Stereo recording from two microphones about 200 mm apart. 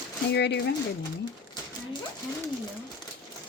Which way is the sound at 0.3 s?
55° left (ahead or behind).